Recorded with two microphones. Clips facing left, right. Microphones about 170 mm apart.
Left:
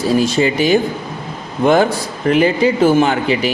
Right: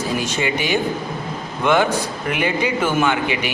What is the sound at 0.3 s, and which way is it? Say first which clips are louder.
A man's voice: left 7 dB; 35° left (ahead or behind).